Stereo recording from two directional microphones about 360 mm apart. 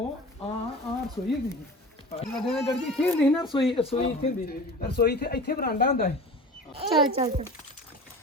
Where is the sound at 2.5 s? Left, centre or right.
Centre; by 6.1 s left.